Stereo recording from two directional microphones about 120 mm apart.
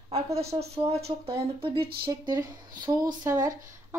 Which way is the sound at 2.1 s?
30° right (ahead or behind).